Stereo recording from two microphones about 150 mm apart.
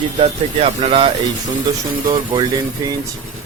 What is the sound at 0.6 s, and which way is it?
Speech, 45° right (ahead or behind).